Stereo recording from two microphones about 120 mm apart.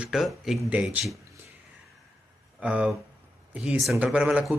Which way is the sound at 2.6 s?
10° right (ahead or behind).